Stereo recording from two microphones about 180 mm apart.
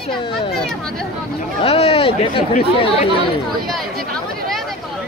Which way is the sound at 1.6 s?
30° left (ahead or behind).